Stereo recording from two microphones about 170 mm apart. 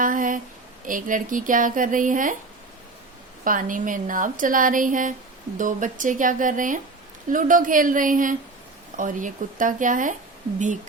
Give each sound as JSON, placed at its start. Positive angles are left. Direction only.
{"t": 0.0, "sound": "a sound", "side_deg": -50}
{"t": 0.9, "sound": "a woman's voice", "side_deg": -50}
{"t": 3.4, "sound": "a woman's voice", "side_deg": -55}